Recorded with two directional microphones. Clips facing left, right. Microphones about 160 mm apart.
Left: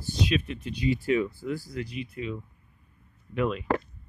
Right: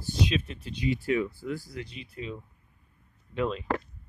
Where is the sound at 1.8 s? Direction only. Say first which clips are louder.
Left 5 dB; 30° right (ahead or behind).